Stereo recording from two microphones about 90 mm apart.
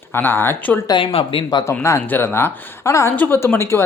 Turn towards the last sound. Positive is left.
turn(degrees=30)  # may be behind; listen again after turning